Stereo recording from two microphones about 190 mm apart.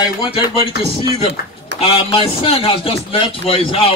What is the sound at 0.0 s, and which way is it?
A man's voice, 25° left (ahead or behind).